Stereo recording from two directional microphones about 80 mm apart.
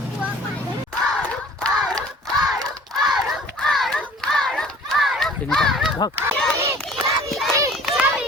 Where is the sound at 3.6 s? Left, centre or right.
Centre.